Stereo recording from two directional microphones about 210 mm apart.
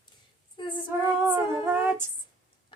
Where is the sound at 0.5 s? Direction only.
20° left (ahead or behind).